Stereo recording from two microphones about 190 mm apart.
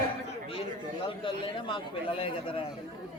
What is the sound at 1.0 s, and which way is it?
A man's voice, 30° left (ahead or behind).